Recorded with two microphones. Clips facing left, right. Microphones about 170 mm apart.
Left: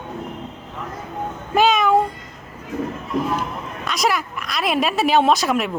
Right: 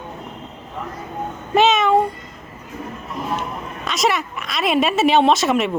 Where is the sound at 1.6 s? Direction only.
Centre (ahead or behind).